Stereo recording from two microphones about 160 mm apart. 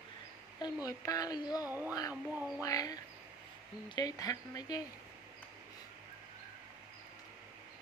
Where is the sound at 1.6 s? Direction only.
10° right (ahead or behind).